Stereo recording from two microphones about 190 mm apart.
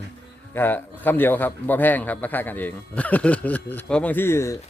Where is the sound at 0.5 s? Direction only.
10° left (ahead or behind).